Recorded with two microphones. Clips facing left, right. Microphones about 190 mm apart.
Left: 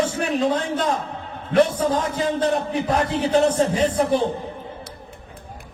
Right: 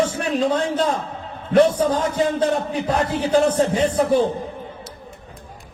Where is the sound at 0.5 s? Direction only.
25° right (ahead or behind).